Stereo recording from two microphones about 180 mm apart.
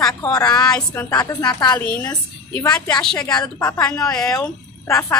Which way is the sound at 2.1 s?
20° left (ahead or behind).